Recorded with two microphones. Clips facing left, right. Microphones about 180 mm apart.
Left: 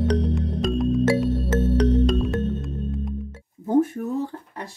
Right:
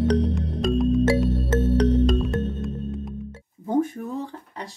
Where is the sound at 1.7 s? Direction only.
35° right (ahead or behind).